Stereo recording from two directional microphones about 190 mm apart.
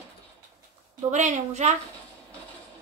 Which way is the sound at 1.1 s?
40° right (ahead or behind).